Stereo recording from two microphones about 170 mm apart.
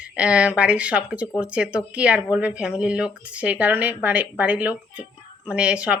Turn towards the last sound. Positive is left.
turn(degrees=-5)  # may be behind; listen again after turning